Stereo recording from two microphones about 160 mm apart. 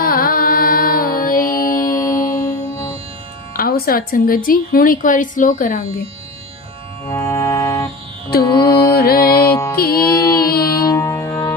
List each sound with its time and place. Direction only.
0.0 s music: 65° left (ahead or behind)
1.9 s music: 20° left (ahead or behind)
3.5 s a woman's voice: 70° left (ahead or behind)
7.1 s music: 15° left (ahead or behind)
8.5 s music: 25° left (ahead or behind)
9.0 s music: 70° left (ahead or behind)
10.8 s music: 20° left (ahead or behind)